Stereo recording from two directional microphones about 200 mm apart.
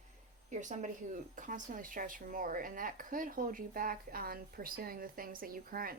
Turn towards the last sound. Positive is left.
turn(degrees=-45)  # may be behind; listen again after turning